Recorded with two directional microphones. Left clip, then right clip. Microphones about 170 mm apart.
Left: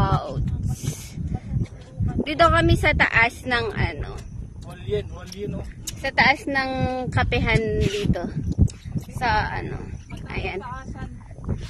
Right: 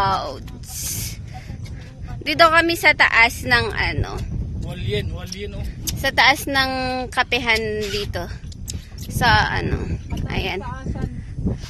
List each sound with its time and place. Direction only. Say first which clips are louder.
0.0 s a sound: right 5 dB; centre (ahead or behind)
2.2 s speech: right 4 dB; 5° left (ahead or behind)
6.0 s speech: right 3 dB; centre (ahead or behind)